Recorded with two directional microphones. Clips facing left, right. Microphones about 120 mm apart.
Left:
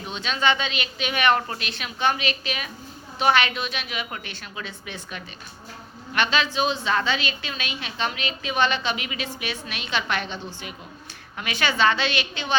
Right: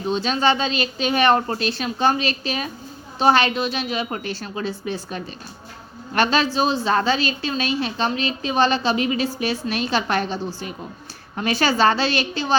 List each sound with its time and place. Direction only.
0.0 s a woman's voice: 35° right (ahead or behind)